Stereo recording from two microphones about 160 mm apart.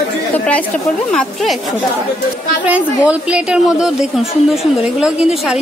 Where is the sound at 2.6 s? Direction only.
10° right (ahead or behind).